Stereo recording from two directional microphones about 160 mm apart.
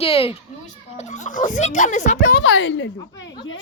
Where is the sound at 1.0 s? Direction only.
50° left (ahead or behind).